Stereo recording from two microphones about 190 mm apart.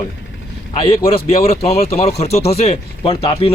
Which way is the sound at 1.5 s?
30° left (ahead or behind).